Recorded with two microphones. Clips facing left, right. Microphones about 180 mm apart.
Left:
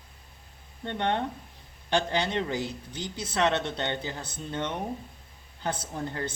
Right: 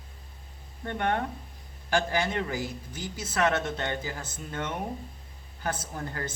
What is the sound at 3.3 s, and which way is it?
Speech, 25° left (ahead or behind).